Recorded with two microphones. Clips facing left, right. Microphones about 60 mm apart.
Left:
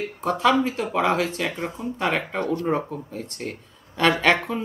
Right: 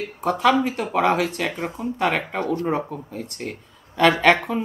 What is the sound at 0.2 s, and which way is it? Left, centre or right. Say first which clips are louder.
Speech: right 1 dB; centre.